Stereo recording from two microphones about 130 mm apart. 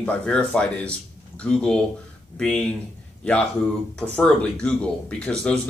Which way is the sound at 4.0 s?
5° left (ahead or behind).